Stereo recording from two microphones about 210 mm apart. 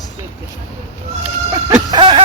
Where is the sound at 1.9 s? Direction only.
25° right (ahead or behind).